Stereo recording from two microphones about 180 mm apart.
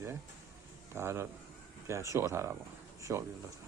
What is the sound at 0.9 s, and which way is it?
Speech, 15° right (ahead or behind).